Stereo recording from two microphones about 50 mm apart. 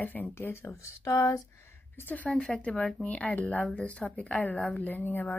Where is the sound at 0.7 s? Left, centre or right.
Left.